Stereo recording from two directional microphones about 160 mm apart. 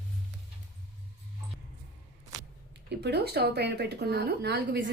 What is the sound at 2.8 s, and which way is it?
Speech, 90° right.